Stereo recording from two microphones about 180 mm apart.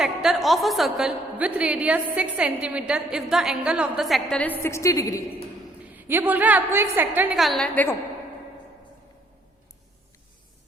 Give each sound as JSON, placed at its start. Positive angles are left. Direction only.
{"t": 0.0, "sound": "a woman's voice", "side_deg": 0}
{"t": 4.6, "sound": "a woman's voice", "side_deg": 15}
{"t": 5.8, "sound": "a woman's voice", "side_deg": -10}